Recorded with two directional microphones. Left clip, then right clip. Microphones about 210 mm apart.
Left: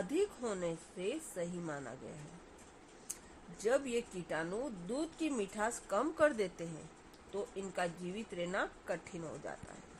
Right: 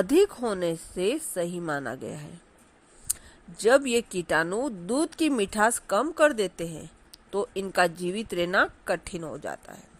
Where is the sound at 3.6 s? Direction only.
40° right (ahead or behind).